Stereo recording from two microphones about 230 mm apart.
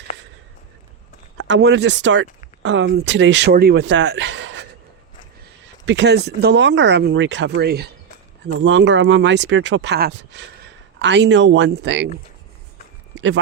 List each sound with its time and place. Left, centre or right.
1.4 s speech: right
5.8 s speech: right
13.1 s speech: right